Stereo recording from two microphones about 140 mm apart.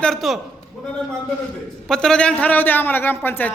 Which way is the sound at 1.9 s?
5° left (ahead or behind).